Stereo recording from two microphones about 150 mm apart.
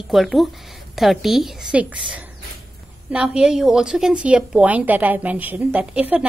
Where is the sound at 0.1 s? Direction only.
Centre (ahead or behind).